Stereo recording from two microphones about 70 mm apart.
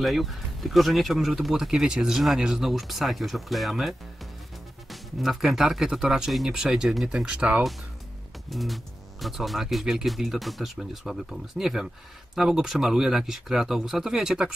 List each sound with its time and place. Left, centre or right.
0.0 s speech: centre
7.2 s speech: centre
8.5 s speech: centre